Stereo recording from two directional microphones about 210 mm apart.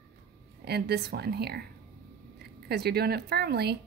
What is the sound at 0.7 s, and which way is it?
A woman's voice, 50° right (ahead or behind).